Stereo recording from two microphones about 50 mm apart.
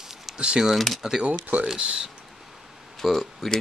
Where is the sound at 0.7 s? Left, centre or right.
Centre.